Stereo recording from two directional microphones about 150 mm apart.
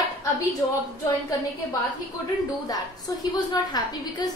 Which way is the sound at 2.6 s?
25° left (ahead or behind).